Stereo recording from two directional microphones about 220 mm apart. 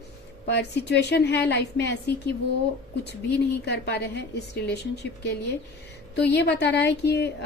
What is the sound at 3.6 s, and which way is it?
A woman's voice, 50° left (ahead or behind).